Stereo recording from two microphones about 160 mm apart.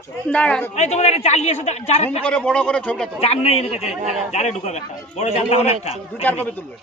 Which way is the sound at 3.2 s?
40° left (ahead or behind).